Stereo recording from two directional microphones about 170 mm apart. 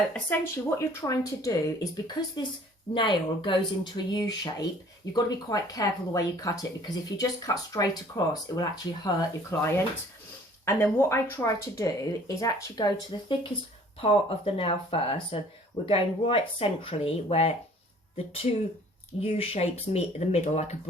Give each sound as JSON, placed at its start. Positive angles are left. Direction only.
{"t": 0.1, "sound": "speech", "side_deg": 15}
{"t": 19.2, "sound": "speech", "side_deg": 35}